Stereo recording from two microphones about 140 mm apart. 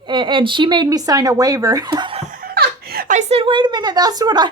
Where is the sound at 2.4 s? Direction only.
90° right.